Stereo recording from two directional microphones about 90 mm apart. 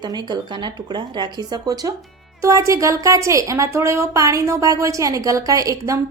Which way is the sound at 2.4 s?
40° right (ahead or behind).